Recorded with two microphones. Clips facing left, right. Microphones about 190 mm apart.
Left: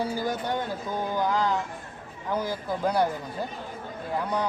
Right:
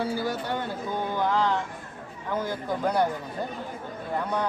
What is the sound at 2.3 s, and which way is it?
Speech, 10° left (ahead or behind).